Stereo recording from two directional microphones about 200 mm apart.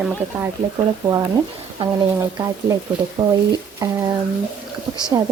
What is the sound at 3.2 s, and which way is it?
Speech, 15° right (ahead or behind).